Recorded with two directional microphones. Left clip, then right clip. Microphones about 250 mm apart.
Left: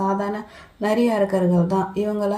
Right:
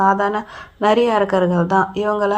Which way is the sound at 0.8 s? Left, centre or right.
Centre.